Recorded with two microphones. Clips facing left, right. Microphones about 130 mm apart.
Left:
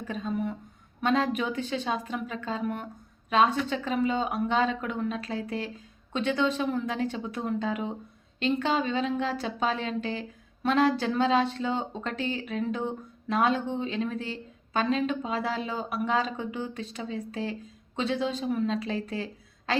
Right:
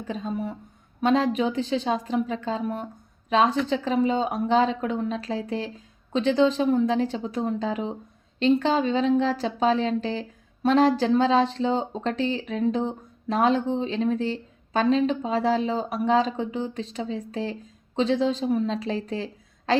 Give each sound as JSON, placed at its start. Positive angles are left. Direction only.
{"t": 0.1, "sound": "speech", "side_deg": -30}